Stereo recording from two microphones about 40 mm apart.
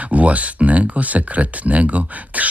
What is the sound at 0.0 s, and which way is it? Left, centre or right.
Speech, right.